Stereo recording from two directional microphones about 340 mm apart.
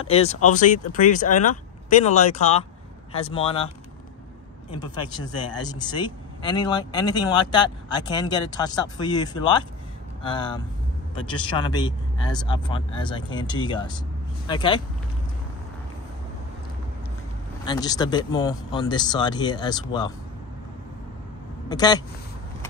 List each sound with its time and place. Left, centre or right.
0.0 s speech: centre
5.8 s speech: centre
17.6 s speech: centre
21.6 s speech: centre